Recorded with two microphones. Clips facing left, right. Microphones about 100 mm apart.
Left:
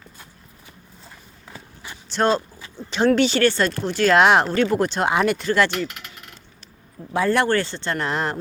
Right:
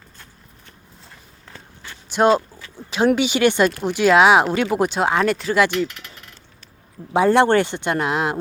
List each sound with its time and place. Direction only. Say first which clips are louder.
1.5 s walk: left 1 dB; 10° left (ahead or behind)
2.0 s speech: right 4 dB; 10° right (ahead or behind)
7.1 s speech: right 5 dB; 20° right (ahead or behind)